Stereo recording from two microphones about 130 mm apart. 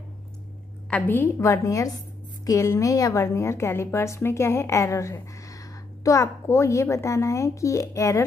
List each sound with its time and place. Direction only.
0.8 s a woman's voice: 15° left (ahead or behind)